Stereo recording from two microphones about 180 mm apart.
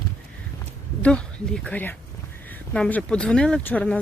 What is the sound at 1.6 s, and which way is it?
Speech, 10° left (ahead or behind).